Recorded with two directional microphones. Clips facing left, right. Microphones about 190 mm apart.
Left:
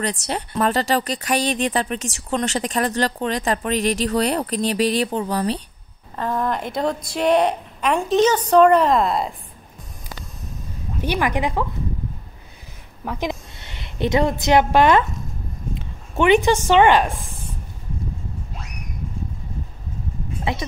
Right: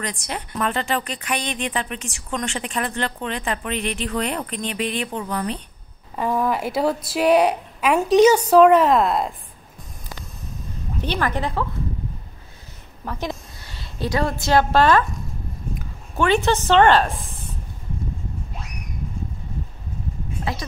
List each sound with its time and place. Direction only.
0.0 s a woman's voice: 30° left (ahead or behind)
6.1 s a woman's voice: 10° right (ahead or behind)
11.0 s a woman's voice: 10° left (ahead or behind)
13.0 s a woman's voice: 15° left (ahead or behind)
20.5 s a woman's voice: 25° left (ahead or behind)